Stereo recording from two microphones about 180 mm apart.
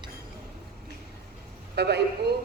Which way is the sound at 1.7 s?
65° right (ahead or behind).